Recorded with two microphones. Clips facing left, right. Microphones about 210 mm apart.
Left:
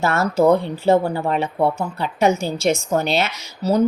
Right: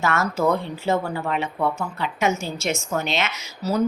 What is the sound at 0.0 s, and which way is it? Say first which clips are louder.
A woman's voice: left 5 dB; 35° left (ahead or behind).